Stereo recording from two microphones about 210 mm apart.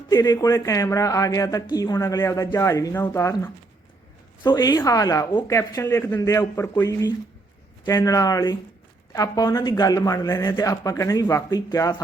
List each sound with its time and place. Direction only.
0.1 s speech: 15° left (ahead or behind)